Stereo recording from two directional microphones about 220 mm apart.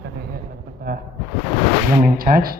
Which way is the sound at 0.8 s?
45° right (ahead or behind).